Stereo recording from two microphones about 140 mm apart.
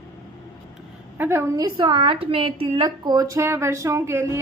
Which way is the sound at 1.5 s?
35° right (ahead or behind).